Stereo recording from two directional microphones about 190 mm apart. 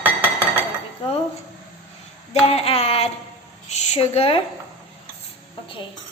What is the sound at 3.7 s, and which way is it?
Speech, 35° left (ahead or behind).